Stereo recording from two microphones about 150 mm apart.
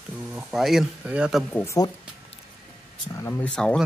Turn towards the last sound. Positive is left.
turn(degrees=5)  # may be behind; listen again after turning